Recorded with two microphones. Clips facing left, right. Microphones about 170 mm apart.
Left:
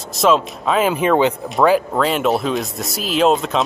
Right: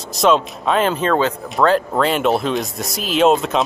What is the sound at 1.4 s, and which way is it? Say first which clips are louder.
Speech: left 1 dB; 5° left (ahead or behind).